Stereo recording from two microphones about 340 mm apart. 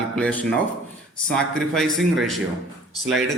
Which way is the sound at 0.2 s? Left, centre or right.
Centre.